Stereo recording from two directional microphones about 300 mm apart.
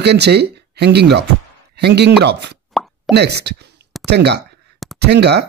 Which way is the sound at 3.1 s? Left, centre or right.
Right.